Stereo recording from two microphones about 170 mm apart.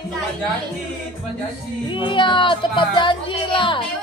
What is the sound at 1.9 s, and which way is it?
A woman's voice, 30° left (ahead or behind).